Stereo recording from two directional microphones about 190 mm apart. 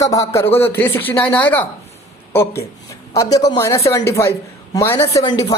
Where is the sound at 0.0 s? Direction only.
20° left (ahead or behind).